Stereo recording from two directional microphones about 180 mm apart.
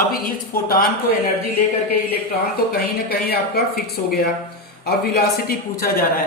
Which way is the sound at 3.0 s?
60° left (ahead or behind).